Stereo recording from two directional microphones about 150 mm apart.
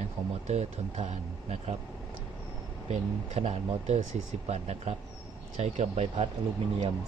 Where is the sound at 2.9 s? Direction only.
50° right (ahead or behind).